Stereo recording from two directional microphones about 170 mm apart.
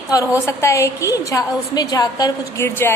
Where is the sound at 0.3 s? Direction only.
15° left (ahead or behind).